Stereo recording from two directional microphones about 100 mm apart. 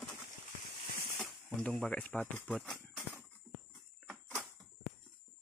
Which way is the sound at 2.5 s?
Centre (ahead or behind).